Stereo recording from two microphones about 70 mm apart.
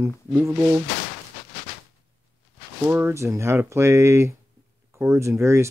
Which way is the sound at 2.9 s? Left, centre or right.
Right.